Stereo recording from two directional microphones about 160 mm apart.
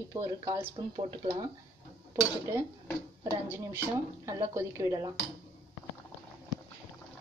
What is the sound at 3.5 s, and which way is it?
Speech, 15° right (ahead or behind).